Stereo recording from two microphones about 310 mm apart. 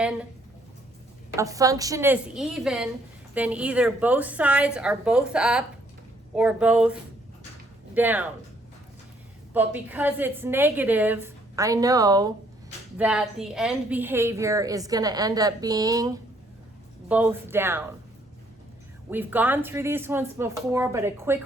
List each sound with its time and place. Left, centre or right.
1.4 s a woman's voice: centre
7.9 s a woman's voice: centre
9.5 s a woman's voice: centre
19.1 s a woman's voice: centre